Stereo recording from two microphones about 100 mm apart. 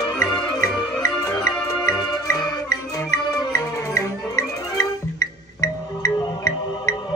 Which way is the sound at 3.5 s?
30° left (ahead or behind).